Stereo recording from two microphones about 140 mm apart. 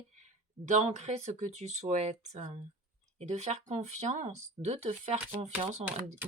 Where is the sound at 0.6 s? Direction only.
55° right (ahead or behind).